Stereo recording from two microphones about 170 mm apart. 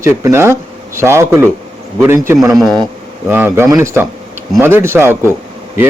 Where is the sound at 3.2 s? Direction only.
10° right (ahead or behind).